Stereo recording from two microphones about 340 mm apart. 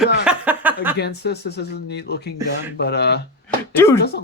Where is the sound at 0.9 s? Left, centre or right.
Left.